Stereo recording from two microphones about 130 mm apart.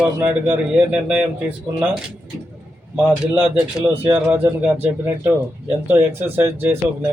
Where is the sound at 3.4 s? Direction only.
10° right (ahead or behind).